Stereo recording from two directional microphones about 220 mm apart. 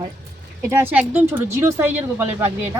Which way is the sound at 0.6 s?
10° right (ahead or behind).